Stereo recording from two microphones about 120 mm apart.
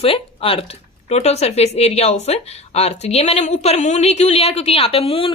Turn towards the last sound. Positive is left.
turn(degrees=50)  # may be behind; listen again after turning